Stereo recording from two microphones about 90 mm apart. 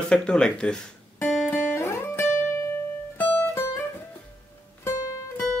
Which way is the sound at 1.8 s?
30° left (ahead or behind).